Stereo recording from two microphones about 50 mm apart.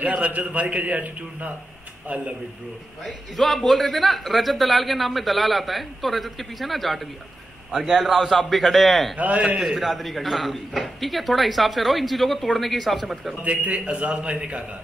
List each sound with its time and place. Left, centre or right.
0.0 s a man's voice: right
3.3 s a man's voice: centre
9.2 s a man's voice: right
9.6 s a man's voice: centre
13.4 s a man's voice: right